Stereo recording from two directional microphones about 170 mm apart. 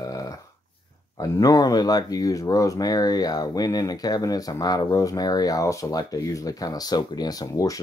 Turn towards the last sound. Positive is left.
turn(degrees=20)  # may be behind; listen again after turning